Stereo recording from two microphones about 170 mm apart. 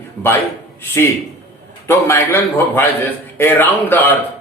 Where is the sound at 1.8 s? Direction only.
15° left (ahead or behind).